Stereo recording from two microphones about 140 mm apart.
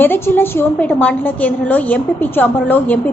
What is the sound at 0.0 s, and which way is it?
A woman's voice, 15° left (ahead or behind).